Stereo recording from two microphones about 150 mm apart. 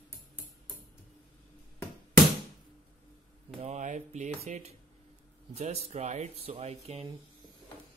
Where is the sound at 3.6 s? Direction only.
50° right (ahead or behind).